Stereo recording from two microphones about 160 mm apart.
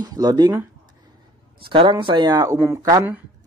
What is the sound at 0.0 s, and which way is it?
Speech, 25° right (ahead or behind).